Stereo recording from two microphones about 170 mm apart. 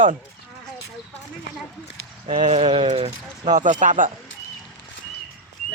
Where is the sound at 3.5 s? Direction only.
50° right (ahead or behind).